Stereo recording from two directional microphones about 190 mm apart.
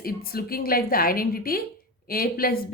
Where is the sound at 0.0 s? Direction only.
50° left (ahead or behind).